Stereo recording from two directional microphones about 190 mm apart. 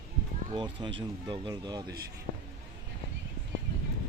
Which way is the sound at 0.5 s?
25° right (ahead or behind).